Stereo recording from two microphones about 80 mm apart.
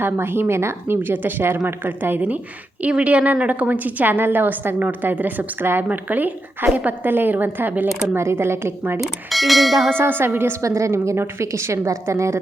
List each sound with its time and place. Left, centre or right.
0.0 s a woman's voice: right
8.2 s a woman's voice: right
9.0 s bell: centre
10.0 s a woman's voice: right
10.6 s a woman's voice: right